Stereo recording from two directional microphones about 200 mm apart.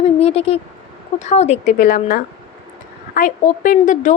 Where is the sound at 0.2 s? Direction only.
30° left (ahead or behind).